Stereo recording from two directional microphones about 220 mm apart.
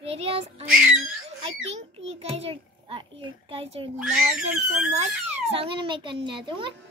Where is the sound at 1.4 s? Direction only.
25° right (ahead or behind).